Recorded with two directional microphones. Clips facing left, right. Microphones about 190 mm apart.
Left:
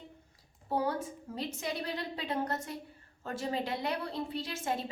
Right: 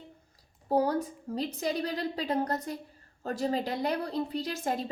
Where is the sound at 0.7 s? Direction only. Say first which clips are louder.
Right 6 dB; 40° right (ahead or behind).